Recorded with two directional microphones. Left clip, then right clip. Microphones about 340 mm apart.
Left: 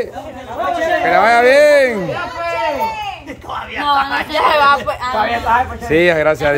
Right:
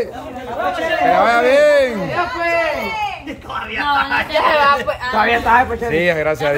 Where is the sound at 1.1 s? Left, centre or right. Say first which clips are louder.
Left 3 dB; centre.